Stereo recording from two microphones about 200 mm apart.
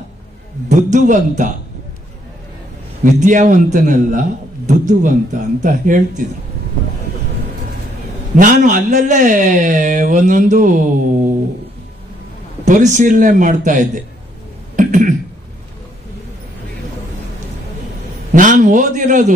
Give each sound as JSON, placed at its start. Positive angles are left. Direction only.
{"t": 0.7, "sound": "a man's voice", "side_deg": -40}
{"t": 3.0, "sound": "a man's voice", "side_deg": -40}
{"t": 8.4, "sound": "a man's voice", "side_deg": -40}
{"t": 12.6, "sound": "a man's voice", "side_deg": -40}
{"t": 14.8, "sound": "a sound", "side_deg": -40}
{"t": 18.3, "sound": "a man's voice", "side_deg": -40}